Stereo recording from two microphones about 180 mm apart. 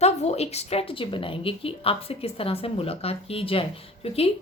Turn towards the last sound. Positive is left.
turn(degrees=35)  # may be behind; listen again after turning